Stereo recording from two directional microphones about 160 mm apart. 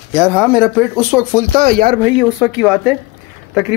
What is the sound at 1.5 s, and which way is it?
Speech, 55° right (ahead or behind).